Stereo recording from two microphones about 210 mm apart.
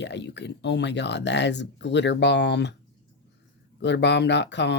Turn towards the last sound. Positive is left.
turn(degrees=55)  # may be behind; listen again after turning